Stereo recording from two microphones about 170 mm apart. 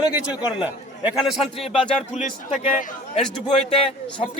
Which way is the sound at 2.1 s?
45° left (ahead or behind).